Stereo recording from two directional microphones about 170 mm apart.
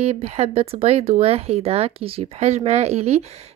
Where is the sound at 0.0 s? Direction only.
40° right (ahead or behind).